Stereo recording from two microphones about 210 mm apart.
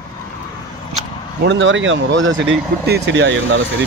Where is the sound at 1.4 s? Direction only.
60° right (ahead or behind).